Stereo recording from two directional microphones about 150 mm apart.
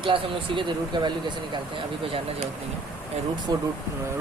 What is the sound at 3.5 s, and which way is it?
Speech, 25° right (ahead or behind).